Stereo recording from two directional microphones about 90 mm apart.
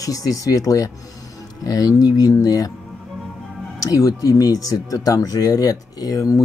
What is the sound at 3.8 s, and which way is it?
Speech, 40° left (ahead or behind).